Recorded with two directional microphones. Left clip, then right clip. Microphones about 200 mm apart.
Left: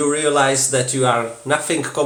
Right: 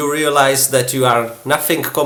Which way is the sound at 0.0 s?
30° right (ahead or behind).